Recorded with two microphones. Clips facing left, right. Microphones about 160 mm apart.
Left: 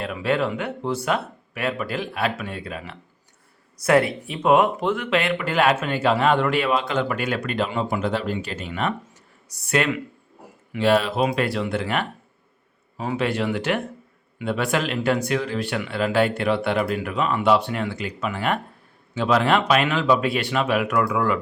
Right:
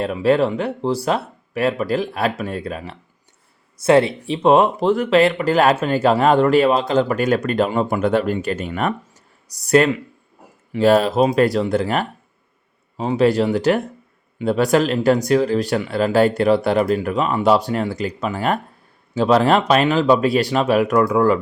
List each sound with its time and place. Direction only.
0.0 s speech: 35° right (ahead or behind)
3.8 s speech: 25° right (ahead or behind)
13.1 s speech: 35° right (ahead or behind)